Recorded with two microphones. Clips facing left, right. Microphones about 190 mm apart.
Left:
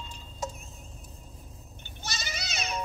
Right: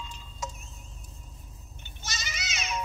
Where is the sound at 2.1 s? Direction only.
35° left (ahead or behind).